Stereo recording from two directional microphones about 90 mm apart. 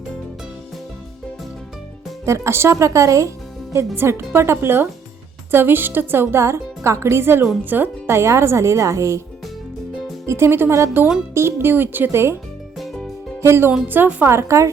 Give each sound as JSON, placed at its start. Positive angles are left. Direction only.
{"t": 2.2, "sound": "speech", "side_deg": -35}
{"t": 10.2, "sound": "speech", "side_deg": -30}
{"t": 12.7, "sound": "music", "side_deg": 0}
{"t": 13.4, "sound": "speech", "side_deg": -25}